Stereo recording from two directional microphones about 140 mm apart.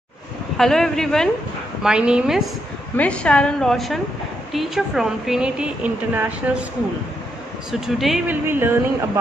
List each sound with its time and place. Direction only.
0.6 s speech: 5° left (ahead or behind)
3.0 s a woman's voice: 10° left (ahead or behind); by 6.6 s 10° right (ahead or behind)
7.8 s speech: centre (ahead or behind)
8.3 s speech: 15° right (ahead or behind)